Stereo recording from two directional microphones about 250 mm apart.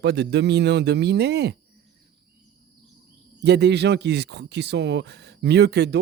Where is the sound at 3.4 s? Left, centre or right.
Right.